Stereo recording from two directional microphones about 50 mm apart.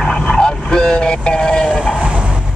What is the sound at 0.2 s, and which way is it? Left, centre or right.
Vehicle, centre.